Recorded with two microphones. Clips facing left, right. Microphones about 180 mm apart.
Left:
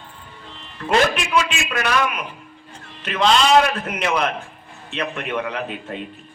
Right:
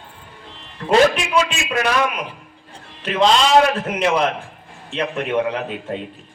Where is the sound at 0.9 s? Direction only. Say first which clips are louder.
Right 3 dB; 30° right (ahead or behind).